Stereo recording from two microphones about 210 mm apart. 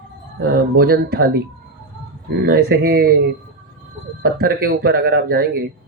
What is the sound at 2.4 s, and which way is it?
Speech, 50° right (ahead or behind).